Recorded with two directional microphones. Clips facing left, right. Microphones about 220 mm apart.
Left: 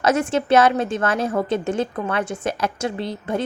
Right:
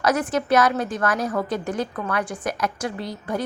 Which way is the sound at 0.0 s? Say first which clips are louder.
Left 2 dB; 25° left (ahead or behind).